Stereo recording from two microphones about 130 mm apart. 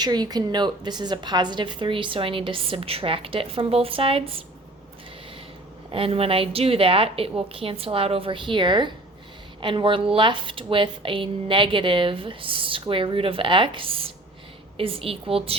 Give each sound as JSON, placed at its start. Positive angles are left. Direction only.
{"t": 0.0, "sound": "a woman's voice", "side_deg": -30}
{"t": 5.9, "sound": "a woman's voice", "side_deg": -45}